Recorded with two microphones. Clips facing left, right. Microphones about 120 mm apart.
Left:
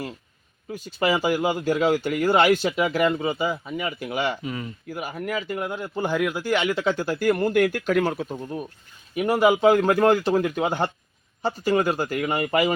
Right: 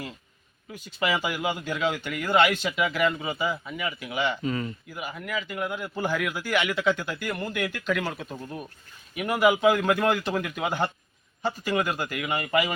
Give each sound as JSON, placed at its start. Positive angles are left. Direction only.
{"t": 0.7, "sound": "speech", "side_deg": 35}
{"t": 4.4, "sound": "speech", "side_deg": 10}
{"t": 4.9, "sound": "speech", "side_deg": 45}
{"t": 8.2, "sound": "speech", "side_deg": 20}
{"t": 9.1, "sound": "speech", "side_deg": 30}